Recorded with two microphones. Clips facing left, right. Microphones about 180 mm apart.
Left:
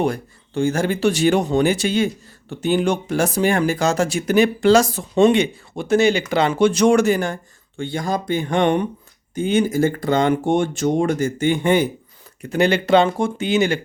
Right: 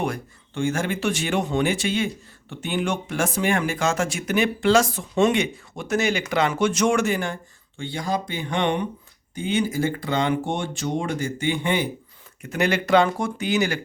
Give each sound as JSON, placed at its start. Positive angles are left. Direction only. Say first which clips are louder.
{"t": 0.0, "sound": "speech", "louder": "left 6 dB", "side_deg": 35}
{"t": 12.4, "sound": "speech", "louder": "left 5 dB", "side_deg": 30}